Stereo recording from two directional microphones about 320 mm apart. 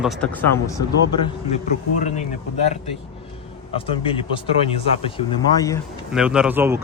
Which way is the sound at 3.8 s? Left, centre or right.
Centre.